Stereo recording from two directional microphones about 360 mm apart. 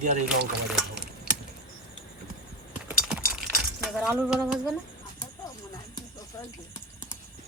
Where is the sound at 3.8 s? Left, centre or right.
Centre.